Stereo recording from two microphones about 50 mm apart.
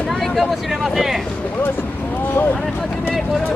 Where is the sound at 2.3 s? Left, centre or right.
Left.